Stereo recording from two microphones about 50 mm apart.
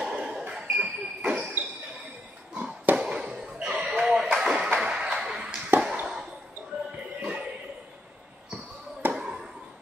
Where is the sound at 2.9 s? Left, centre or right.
Centre.